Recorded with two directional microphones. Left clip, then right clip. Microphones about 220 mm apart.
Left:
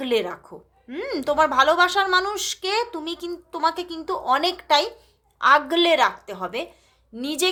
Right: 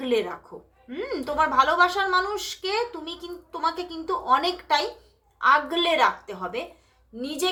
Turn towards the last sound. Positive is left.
turn(degrees=45)  # may be behind; listen again after turning